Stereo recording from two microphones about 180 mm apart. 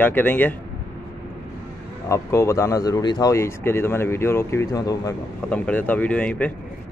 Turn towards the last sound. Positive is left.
turn(degrees=10)  # may be behind; listen again after turning